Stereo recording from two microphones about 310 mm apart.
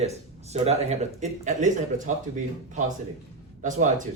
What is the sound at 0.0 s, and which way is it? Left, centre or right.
Speech, centre.